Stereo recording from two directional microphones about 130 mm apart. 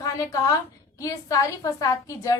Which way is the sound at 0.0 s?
25° left (ahead or behind).